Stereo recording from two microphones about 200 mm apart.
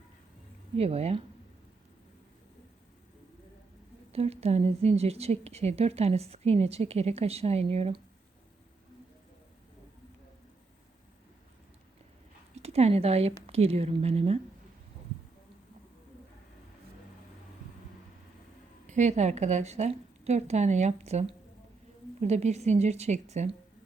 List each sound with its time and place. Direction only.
0.8 s a woman's voice: 30° right (ahead or behind)
4.1 s a woman's voice: 30° right (ahead or behind)
12.5 s a woman's voice: 30° right (ahead or behind)
18.9 s a woman's voice: 35° right (ahead or behind)